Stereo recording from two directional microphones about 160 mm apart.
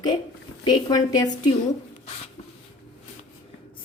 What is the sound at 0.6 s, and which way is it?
Speech, 25° left (ahead or behind).